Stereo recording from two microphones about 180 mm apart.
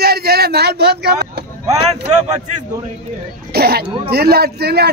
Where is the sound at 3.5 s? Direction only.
60° right (ahead or behind).